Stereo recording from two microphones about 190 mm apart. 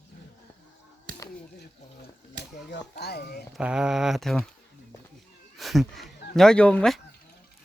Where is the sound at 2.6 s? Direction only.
60° left (ahead or behind).